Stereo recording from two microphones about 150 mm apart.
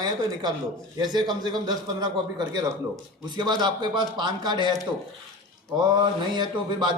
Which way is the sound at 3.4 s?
30° right (ahead or behind).